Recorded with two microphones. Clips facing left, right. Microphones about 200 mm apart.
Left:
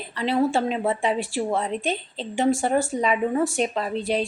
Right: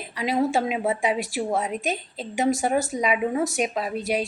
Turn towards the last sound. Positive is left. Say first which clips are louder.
# left 1 dB
turn(degrees=-10)  # may be behind; listen again after turning